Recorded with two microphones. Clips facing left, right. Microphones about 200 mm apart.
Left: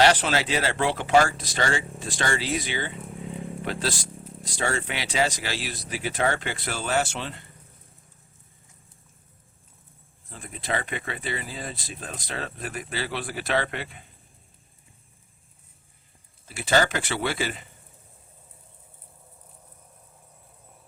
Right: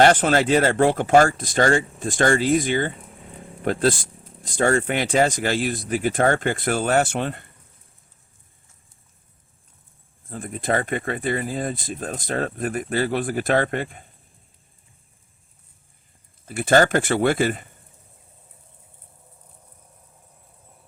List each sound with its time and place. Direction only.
0.0 s speech: 50° right (ahead or behind)
10.2 s speech: 50° right (ahead or behind)
16.5 s speech: 50° right (ahead or behind)